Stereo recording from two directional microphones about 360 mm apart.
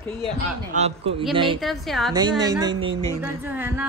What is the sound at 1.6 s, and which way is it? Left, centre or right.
Speech, centre.